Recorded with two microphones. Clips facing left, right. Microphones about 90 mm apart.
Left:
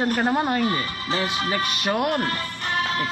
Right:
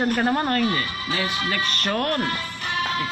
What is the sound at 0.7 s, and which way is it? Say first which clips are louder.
Speech: left 1 dB; 20° left (ahead or behind).